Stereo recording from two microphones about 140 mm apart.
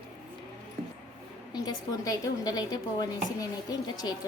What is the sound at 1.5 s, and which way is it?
A woman's voice, 30° left (ahead or behind).